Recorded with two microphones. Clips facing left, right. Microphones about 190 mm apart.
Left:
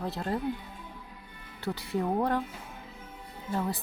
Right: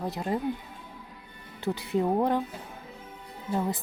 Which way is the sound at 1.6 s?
20° right (ahead or behind).